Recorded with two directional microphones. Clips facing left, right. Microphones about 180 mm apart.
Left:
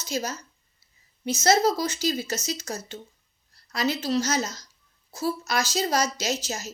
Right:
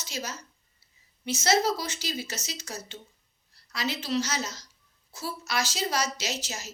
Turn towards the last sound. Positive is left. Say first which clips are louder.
# left 6 dB
turn(degrees=40)  # may be behind; listen again after turning